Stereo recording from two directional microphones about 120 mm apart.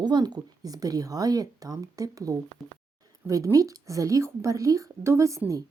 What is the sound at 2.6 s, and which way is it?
Speech, centre (ahead or behind).